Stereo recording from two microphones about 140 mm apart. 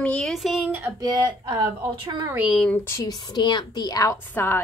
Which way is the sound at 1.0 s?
30° right (ahead or behind).